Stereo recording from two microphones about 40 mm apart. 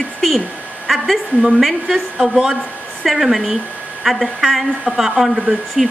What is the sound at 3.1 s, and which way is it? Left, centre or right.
A woman's voice, centre.